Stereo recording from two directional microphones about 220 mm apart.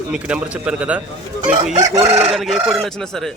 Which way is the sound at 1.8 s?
15° right (ahead or behind).